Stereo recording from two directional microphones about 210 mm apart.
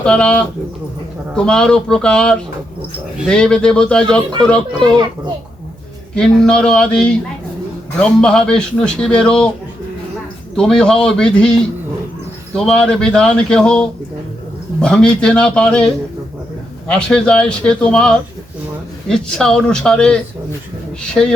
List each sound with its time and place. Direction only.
0.0 s speech: 5° left (ahead or behind)
6.1 s speech: 5° left (ahead or behind)
10.6 s speech: 5° left (ahead or behind)
12.5 s speech: 5° left (ahead or behind)
16.9 s speech: 5° left (ahead or behind)
21.2 s speech: centre (ahead or behind)